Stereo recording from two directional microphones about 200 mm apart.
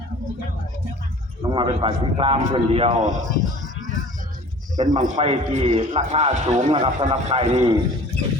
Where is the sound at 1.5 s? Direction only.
25° right (ahead or behind).